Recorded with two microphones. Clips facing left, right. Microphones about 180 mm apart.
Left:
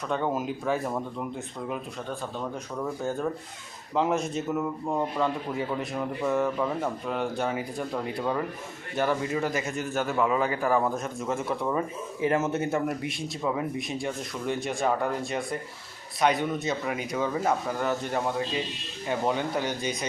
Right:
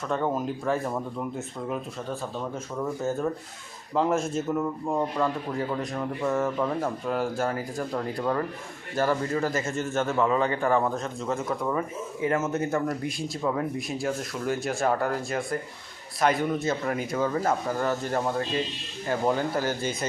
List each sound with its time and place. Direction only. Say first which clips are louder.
0.1 s a man's voice: right 1 dB; centre (ahead or behind)
9.4 s speech: right 1 dB; 15° left (ahead or behind)
9.9 s a man's voice: right 1 dB; centre (ahead or behind)
12.2 s a man's voice: left 1 dB; 20° left (ahead or behind)
12.9 s a man's voice: right 2 dB; centre (ahead or behind)
19.0 s a man's voice: right 2 dB; centre (ahead or behind)